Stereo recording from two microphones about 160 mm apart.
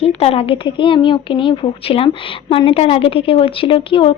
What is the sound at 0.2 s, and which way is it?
Speech, 40° left (ahead or behind).